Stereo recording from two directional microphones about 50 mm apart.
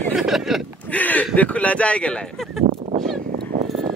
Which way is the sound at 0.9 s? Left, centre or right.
Left.